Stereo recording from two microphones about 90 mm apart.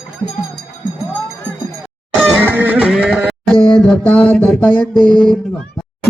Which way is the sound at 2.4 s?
15° right (ahead or behind).